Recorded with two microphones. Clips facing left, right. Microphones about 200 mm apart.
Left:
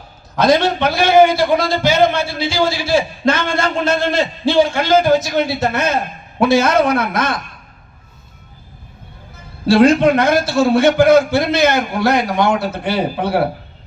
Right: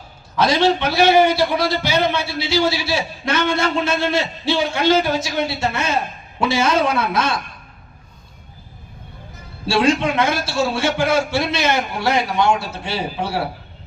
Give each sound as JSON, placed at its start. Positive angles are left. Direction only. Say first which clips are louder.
{"t": 0.3, "sound": "a man's voice", "louder": "left 3 dB", "side_deg": 55}
{"t": 9.6, "sound": "a man's voice", "louder": "left 7 dB", "side_deg": 55}